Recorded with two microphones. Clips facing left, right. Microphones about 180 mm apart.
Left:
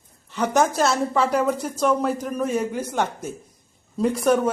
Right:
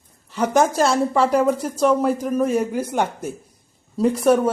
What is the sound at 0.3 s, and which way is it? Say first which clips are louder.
A woman's voice: right 2 dB; 10° right (ahead or behind).